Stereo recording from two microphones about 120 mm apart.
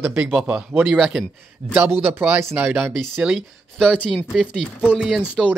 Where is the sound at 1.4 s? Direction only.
15° right (ahead or behind).